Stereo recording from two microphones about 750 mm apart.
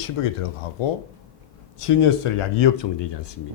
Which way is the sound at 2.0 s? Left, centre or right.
Left.